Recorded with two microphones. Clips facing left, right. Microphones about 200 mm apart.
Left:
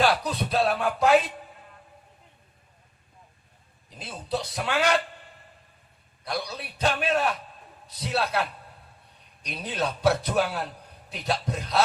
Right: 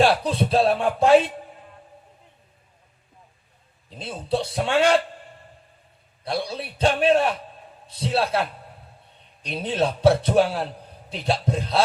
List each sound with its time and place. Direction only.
0.0 s a man's voice: 30° right (ahead or behind)
3.8 s a man's voice: 30° right (ahead or behind)
6.2 s a man's voice: 30° right (ahead or behind)